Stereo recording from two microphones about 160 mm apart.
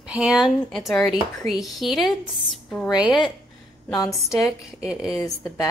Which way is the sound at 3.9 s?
20° left (ahead or behind).